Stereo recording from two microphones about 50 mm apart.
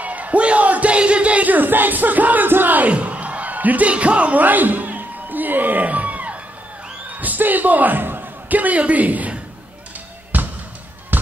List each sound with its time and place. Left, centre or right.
0.0 s speech: right
7.1 s a sound: right
10.3 s basketball bounce: right